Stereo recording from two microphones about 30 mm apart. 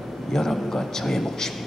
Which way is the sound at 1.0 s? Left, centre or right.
Centre.